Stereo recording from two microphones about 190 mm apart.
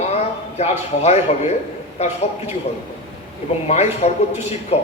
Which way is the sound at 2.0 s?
35° left (ahead or behind).